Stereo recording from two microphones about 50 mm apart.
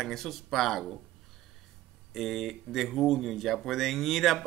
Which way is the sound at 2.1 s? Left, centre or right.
Centre.